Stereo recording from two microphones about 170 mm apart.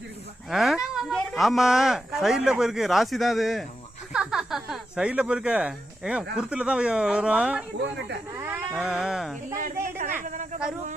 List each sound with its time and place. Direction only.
0.5 s speech: centre (ahead or behind)
10.2 s speech: 50° right (ahead or behind)